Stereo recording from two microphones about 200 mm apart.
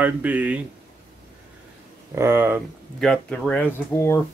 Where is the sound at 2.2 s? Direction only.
10° right (ahead or behind).